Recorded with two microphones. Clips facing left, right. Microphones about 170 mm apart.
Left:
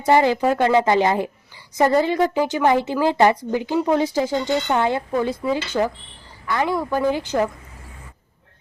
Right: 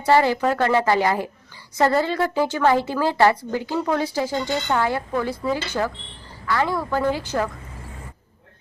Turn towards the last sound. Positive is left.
turn(degrees=20)  # may be behind; listen again after turning